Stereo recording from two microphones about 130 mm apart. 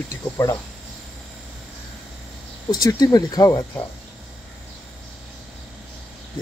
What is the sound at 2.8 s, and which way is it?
Speech, 30° left (ahead or behind).